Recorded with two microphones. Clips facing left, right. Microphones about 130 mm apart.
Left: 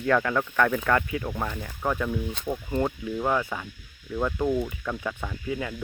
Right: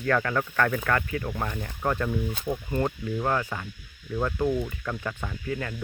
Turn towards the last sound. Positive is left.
turn(degrees=10)  # may be behind; listen again after turning